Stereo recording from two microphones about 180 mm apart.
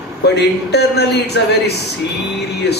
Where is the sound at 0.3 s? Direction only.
65° left (ahead or behind).